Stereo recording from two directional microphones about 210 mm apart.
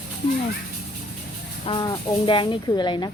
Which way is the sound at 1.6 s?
20° left (ahead or behind).